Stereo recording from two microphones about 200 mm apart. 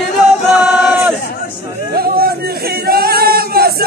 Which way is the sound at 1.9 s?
50° right (ahead or behind).